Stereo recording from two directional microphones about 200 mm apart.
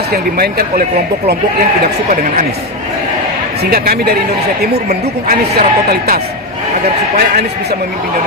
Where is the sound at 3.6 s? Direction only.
50° right (ahead or behind).